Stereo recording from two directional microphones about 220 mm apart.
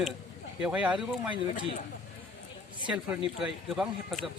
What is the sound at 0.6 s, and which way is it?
Speech, 5° right (ahead or behind).